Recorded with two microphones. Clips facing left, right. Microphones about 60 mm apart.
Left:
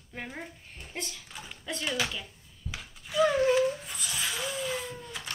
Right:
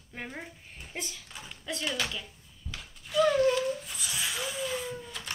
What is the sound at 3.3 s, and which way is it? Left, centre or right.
Speech, left.